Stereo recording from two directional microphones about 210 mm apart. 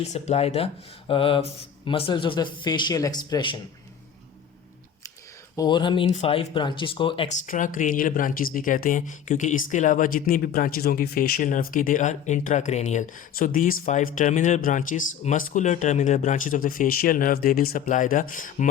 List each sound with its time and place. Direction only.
0.1 s speech: 30° left (ahead or behind)
5.5 s speech: 20° left (ahead or behind)
7.4 s speech: 40° left (ahead or behind)